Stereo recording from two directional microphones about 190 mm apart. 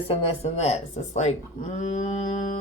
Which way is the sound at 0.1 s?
35° left (ahead or behind).